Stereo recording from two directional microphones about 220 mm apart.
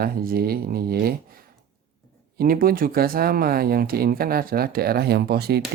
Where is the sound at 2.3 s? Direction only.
40° right (ahead or behind).